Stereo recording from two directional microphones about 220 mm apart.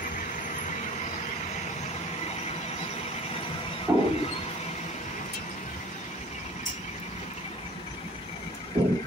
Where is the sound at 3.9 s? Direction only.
15° right (ahead or behind).